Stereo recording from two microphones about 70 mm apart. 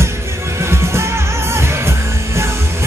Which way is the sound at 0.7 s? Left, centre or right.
Right.